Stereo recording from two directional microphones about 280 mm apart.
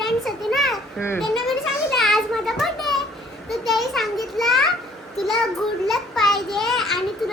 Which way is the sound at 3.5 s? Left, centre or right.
Centre.